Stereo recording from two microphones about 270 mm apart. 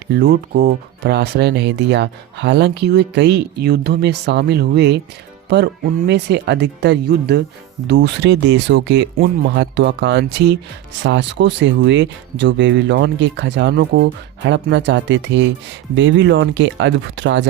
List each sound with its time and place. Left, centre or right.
0.1 s speech: right